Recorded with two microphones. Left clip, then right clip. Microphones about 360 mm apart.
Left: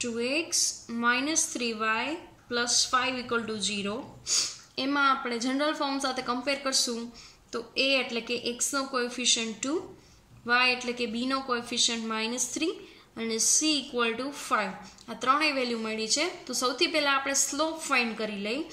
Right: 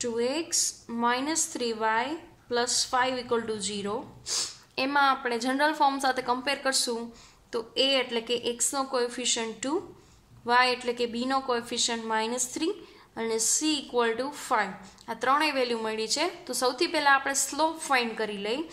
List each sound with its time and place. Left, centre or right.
0.0 s a woman's voice: centre